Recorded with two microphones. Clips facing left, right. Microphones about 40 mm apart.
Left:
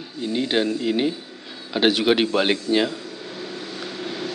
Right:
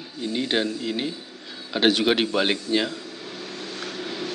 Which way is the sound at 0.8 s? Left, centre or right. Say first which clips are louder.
Left 6 dB; centre.